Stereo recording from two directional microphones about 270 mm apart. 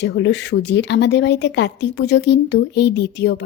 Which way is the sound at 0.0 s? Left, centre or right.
Left.